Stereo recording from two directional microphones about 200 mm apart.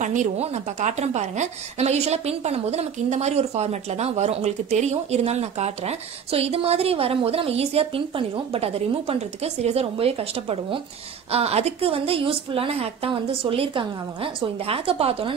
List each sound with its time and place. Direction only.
0.0 s a woman's voice: 40° right (ahead or behind)